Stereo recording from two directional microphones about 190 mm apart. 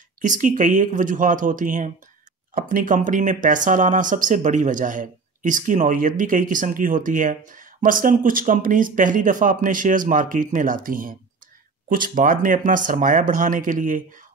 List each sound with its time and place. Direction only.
0.2 s speech: 45° right (ahead or behind)